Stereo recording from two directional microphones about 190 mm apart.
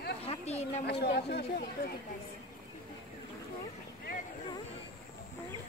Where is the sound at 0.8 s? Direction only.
60° left (ahead or behind).